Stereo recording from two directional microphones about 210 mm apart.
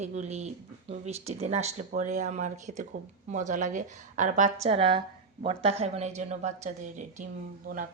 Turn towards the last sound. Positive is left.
turn(degrees=-40)  # may be behind; listen again after turning